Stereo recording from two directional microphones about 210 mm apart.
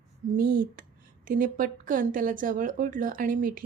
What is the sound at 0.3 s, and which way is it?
A woman's voice, 40° right (ahead or behind).